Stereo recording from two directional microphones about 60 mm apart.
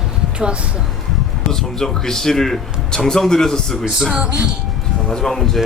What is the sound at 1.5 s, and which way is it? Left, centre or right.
Speech, centre.